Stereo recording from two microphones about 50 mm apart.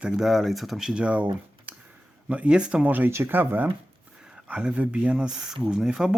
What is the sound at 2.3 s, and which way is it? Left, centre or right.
Speech, right.